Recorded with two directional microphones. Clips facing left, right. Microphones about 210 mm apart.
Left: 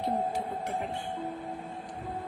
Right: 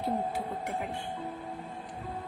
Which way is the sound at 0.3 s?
10° right (ahead or behind).